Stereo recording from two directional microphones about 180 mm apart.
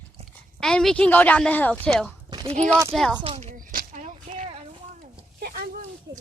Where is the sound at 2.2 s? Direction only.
30° right (ahead or behind).